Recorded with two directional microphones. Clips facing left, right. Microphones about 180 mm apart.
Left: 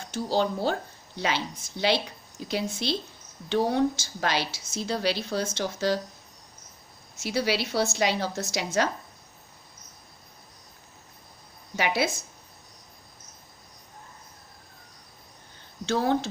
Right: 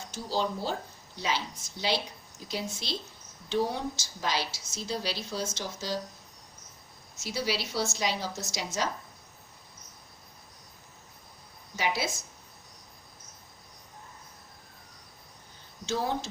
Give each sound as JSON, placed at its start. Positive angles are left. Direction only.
{"t": 0.1, "sound": "a woman's voice", "side_deg": 65}
{"t": 7.2, "sound": "a woman's voice", "side_deg": 65}
{"t": 11.8, "sound": "a woman's voice", "side_deg": 60}
{"t": 15.9, "sound": "a woman's voice", "side_deg": 60}